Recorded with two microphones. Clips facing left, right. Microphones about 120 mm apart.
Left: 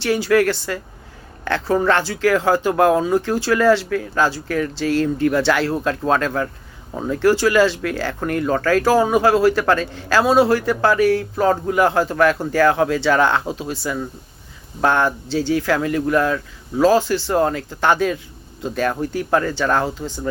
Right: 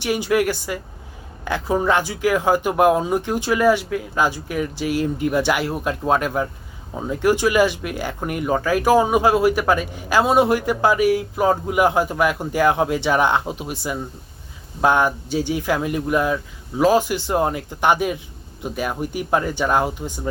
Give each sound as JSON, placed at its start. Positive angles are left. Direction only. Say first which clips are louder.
{"t": 0.0, "sound": "speech", "louder": "left 3 dB", "side_deg": -15}